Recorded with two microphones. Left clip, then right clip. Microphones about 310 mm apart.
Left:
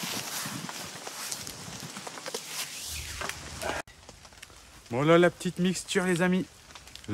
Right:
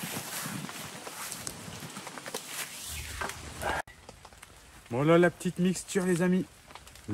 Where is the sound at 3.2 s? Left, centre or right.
Centre.